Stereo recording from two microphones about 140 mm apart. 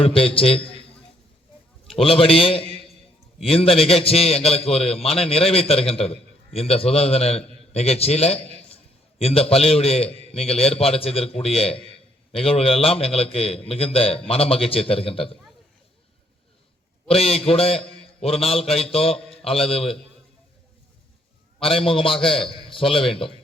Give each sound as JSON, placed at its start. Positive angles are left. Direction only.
{"t": 0.0, "sound": "a man's voice", "side_deg": 40}
{"t": 2.0, "sound": "a man's voice", "side_deg": 40}
{"t": 17.1, "sound": "a man's voice", "side_deg": 45}
{"t": 21.6, "sound": "a man's voice", "side_deg": 40}